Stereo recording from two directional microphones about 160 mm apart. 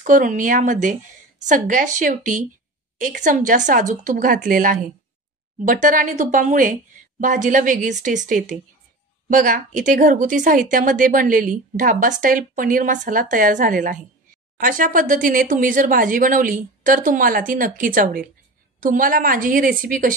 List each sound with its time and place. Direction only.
0.0 s a woman's voice: 55° right (ahead or behind)